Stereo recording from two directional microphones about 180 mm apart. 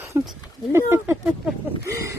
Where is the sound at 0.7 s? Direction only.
15° right (ahead or behind).